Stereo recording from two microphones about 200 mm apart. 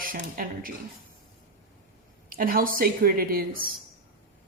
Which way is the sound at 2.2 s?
45° right (ahead or behind).